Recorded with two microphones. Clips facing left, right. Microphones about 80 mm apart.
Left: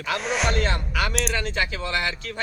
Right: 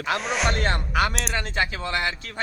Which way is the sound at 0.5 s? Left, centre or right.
Right.